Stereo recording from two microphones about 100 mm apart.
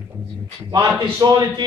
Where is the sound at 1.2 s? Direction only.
40° right (ahead or behind).